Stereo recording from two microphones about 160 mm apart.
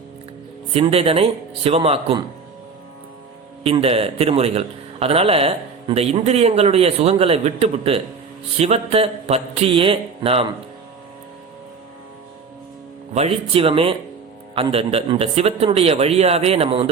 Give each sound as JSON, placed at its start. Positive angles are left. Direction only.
{"t": 0.7, "sound": "a man's voice", "side_deg": -40}
{"t": 3.6, "sound": "a man's voice", "side_deg": -35}
{"t": 13.1, "sound": "a man's voice", "side_deg": -40}